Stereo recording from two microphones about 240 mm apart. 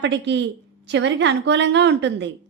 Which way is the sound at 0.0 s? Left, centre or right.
Right.